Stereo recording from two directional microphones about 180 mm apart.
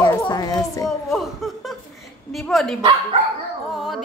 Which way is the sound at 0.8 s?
Centre (ahead or behind).